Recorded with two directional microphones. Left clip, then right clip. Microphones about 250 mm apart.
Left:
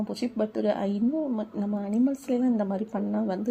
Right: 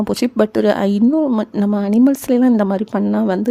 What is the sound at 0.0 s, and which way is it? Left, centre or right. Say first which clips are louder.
Speech: right 13 dB; right.